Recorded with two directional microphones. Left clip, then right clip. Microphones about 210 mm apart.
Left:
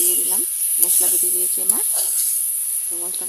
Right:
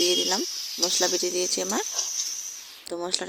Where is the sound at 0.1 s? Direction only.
40° right (ahead or behind).